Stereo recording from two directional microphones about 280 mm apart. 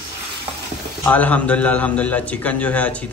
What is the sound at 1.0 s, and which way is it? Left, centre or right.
A man's voice, centre.